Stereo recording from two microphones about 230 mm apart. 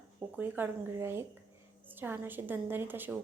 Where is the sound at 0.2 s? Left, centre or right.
Centre.